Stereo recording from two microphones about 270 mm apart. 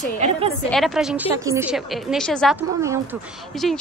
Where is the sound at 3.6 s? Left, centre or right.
Centre.